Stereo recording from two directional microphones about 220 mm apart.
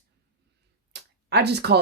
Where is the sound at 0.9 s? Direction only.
50° right (ahead or behind).